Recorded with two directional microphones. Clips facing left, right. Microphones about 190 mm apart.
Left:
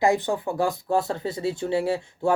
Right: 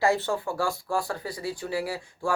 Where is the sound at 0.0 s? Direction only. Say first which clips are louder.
Left 3 dB; 15° left (ahead or behind).